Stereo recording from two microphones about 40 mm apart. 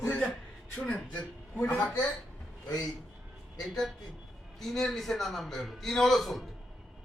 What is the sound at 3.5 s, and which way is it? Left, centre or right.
A man's voice, centre.